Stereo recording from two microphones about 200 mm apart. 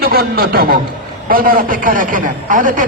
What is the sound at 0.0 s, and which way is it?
A man's voice, 50° right (ahead or behind).